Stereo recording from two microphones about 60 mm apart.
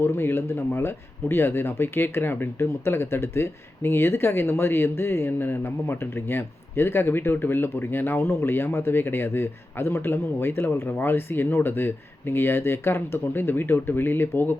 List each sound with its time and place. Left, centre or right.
0.0 s speech: left